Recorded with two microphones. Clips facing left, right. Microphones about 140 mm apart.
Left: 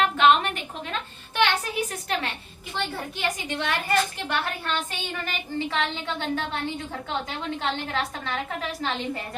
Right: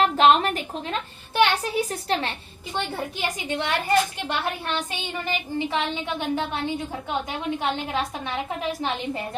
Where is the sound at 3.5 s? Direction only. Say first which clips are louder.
Right 5 dB; 20° right (ahead or behind).